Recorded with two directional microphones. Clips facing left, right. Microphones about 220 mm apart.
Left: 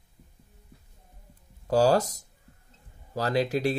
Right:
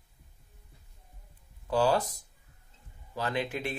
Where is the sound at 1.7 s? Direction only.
40° left (ahead or behind).